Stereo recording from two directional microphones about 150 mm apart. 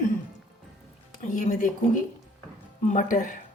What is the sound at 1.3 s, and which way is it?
Speech, 60° left (ahead or behind).